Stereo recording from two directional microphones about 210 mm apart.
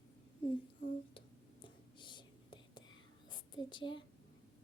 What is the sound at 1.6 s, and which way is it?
Whispering, 20° left (ahead or behind).